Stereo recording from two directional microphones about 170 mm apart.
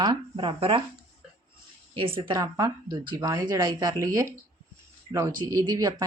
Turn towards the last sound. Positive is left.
turn(degrees=-20)  # may be behind; listen again after turning